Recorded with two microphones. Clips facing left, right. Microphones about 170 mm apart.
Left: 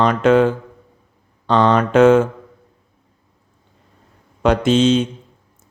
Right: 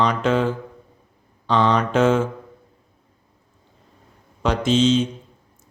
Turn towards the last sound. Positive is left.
turn(degrees=60)  # may be behind; listen again after turning